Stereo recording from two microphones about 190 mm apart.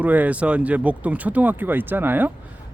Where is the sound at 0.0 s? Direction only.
10° right (ahead or behind).